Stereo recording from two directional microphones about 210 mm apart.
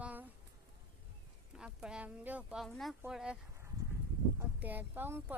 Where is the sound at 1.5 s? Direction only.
5° right (ahead or behind).